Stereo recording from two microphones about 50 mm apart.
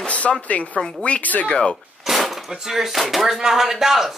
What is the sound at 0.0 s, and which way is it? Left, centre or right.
Speech, left.